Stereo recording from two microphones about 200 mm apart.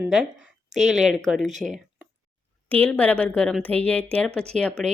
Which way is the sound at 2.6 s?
10° left (ahead or behind).